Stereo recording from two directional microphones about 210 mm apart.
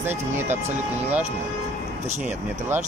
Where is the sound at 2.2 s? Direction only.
10° right (ahead or behind).